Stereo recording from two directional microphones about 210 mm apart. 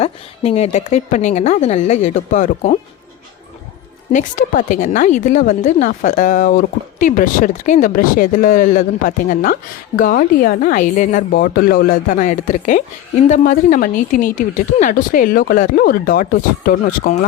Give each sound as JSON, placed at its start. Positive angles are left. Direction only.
{"t": 0.0, "sound": "a woman's voice", "side_deg": 30}
{"t": 4.1, "sound": "a woman's voice", "side_deg": 40}